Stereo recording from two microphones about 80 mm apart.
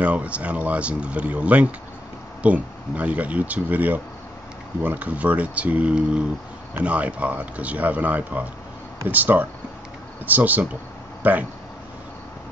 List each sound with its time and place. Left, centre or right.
0.0 s speech: centre